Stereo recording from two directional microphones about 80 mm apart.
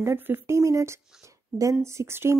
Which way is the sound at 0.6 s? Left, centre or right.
Right.